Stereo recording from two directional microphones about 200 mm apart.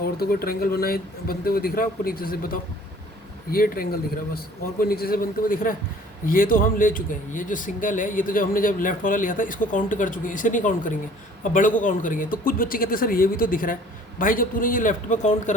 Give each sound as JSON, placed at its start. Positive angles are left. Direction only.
{"t": 0.0, "sound": "speech", "side_deg": 50}